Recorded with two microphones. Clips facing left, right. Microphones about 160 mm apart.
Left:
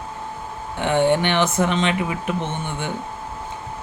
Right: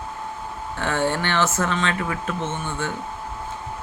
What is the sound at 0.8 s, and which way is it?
Speech, 20° left (ahead or behind).